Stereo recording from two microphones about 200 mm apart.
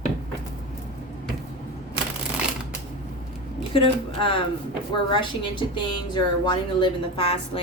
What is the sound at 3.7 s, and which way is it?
A woman's voice, 25° left (ahead or behind).